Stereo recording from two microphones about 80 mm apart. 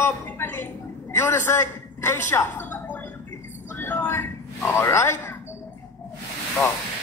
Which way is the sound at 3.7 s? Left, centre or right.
Left.